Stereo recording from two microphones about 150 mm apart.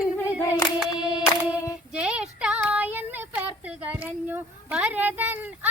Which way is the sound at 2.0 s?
5° right (ahead or behind).